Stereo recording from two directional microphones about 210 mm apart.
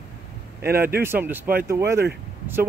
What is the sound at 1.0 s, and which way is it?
Speech, 10° right (ahead or behind).